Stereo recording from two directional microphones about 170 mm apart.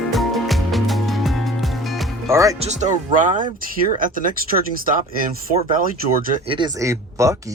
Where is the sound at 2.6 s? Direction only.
45° right (ahead or behind).